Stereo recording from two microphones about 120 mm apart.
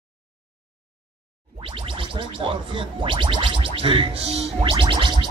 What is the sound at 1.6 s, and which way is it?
Music, 50° right (ahead or behind).